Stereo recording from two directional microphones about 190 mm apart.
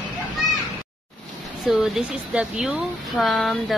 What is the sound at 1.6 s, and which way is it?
Speech, centre (ahead or behind).